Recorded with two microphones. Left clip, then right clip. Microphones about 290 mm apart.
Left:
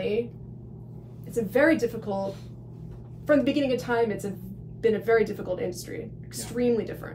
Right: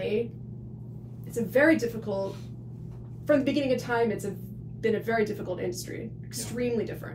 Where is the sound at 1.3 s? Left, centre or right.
Centre.